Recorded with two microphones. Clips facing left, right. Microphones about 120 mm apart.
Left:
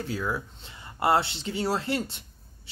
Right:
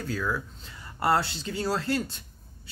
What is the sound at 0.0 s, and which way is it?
Speech, 25° left (ahead or behind).